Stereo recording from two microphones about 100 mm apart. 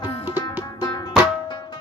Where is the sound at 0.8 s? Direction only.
45° left (ahead or behind).